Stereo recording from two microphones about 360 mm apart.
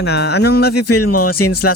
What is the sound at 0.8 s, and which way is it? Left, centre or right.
Speech, left.